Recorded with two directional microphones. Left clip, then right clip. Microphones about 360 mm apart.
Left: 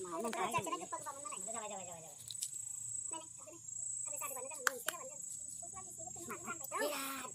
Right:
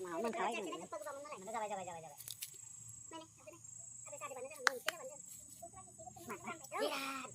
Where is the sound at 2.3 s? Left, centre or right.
Centre.